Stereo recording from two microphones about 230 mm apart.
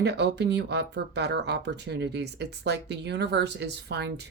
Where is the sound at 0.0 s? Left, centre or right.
Right.